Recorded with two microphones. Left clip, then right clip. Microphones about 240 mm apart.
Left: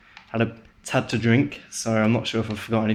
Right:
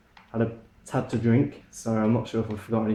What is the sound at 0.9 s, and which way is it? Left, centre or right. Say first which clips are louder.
Speech: left 4 dB; left.